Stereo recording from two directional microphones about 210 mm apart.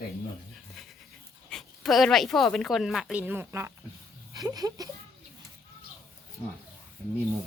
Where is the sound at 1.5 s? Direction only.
Centre (ahead or behind); by 4.8 s 20° right (ahead or behind).